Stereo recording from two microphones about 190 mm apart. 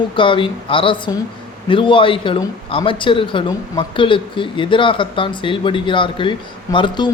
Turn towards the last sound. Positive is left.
turn(degrees=25)  # may be behind; listen again after turning